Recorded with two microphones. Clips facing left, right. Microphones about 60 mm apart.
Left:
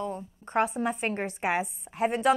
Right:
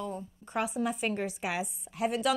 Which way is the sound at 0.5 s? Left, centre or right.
Left.